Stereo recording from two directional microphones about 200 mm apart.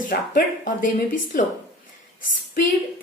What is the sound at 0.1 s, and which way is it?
Speech, 40° left (ahead or behind).